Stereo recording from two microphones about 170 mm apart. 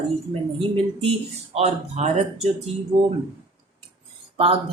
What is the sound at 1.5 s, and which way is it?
Speech, 40° right (ahead or behind).